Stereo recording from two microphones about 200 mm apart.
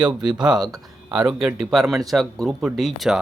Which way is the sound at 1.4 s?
Centre (ahead or behind).